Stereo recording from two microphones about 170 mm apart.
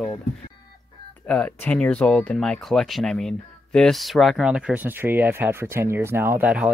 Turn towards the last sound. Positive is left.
turn(degrees=-5)  # may be behind; listen again after turning